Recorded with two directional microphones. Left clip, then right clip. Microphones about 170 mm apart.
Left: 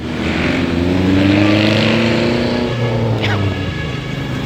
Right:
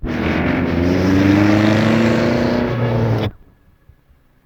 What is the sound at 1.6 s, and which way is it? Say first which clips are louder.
Vehicle: left 1 dB; 15° left (ahead or behind).